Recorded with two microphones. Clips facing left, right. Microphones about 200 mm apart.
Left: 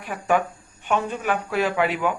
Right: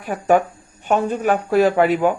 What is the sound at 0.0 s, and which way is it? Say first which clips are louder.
Speech: right 6 dB; 40° right (ahead or behind).